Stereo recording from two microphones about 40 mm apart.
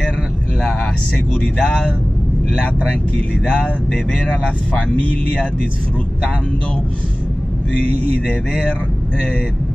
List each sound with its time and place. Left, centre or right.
0.6 s vehicle: centre
1.6 s speech: left
3.4 s speech: left
5.0 s speech: left